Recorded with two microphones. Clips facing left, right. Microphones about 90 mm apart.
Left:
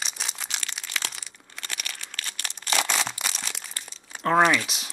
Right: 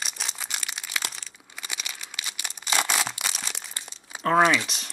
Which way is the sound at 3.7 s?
20° right (ahead or behind).